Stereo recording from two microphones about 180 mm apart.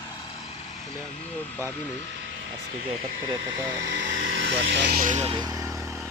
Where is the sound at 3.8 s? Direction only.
85° right.